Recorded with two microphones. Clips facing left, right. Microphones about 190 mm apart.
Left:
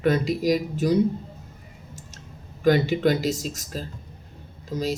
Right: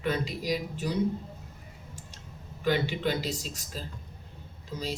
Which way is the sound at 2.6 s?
45° left (ahead or behind).